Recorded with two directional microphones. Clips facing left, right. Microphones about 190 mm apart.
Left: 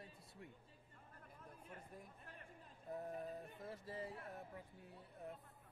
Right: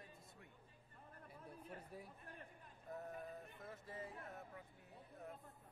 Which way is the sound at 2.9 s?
35° left (ahead or behind).